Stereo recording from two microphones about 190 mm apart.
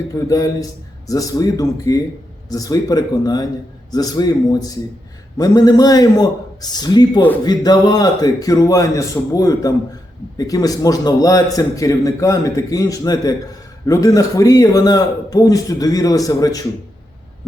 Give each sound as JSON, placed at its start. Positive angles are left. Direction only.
{"t": 0.1, "sound": "a man's voice", "side_deg": 20}